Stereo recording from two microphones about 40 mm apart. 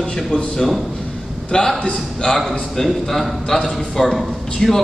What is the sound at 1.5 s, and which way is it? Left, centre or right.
Speech, centre.